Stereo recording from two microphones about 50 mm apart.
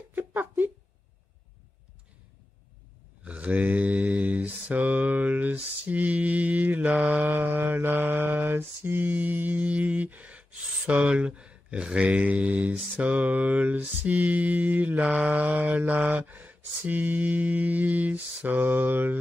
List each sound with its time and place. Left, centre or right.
0.1 s a sound: right
3.3 s mantra: right
10.9 s speech: right
12.9 s mantra: right